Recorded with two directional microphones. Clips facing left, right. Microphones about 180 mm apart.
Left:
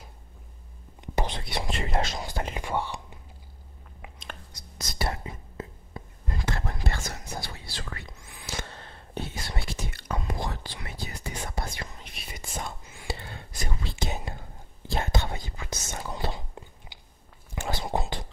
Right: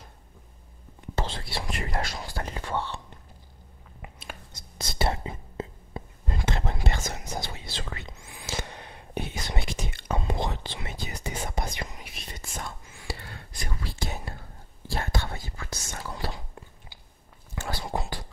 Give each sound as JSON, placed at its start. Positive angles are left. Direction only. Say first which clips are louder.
{"t": 1.0, "sound": "speech", "louder": "left 1 dB", "side_deg": 20}
{"t": 4.0, "sound": "chewing", "louder": "right 1 dB", "side_deg": -5}
{"t": 4.5, "sound": "whispering", "louder": "right 2 dB", "side_deg": -25}
{"t": 12.1, "sound": "whispering", "louder": "right 1 dB", "side_deg": 5}
{"t": 12.5, "sound": "whispering", "louder": "left 3 dB", "side_deg": 25}